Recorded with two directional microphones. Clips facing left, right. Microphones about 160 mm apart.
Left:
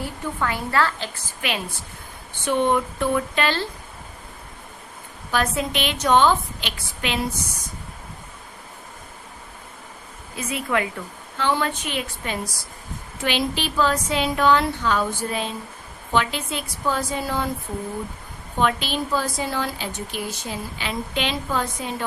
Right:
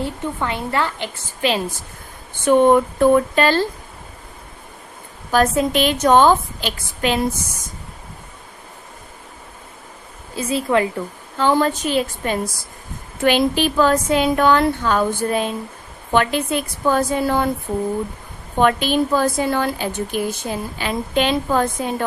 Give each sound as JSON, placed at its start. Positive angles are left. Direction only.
{"t": 0.0, "sound": "a woman's voice", "side_deg": -25}
{"t": 1.4, "sound": "a woman's voice", "side_deg": -30}
{"t": 2.4, "sound": "a woman's voice", "side_deg": -45}
{"t": 5.3, "sound": "a woman's voice", "side_deg": -45}
{"t": 10.3, "sound": "a woman's voice", "side_deg": -30}
{"t": 18.6, "sound": "a woman's voice", "side_deg": -50}